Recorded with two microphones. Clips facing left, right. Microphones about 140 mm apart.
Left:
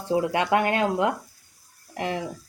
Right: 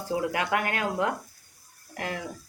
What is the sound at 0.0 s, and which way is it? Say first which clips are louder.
Speech: left 5 dB; 25° left (ahead or behind).